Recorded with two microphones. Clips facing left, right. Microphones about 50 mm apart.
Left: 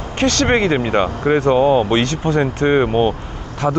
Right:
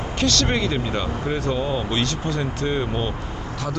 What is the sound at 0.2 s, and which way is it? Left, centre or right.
Speech, left.